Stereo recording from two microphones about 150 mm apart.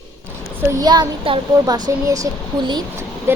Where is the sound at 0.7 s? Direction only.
25° right (ahead or behind).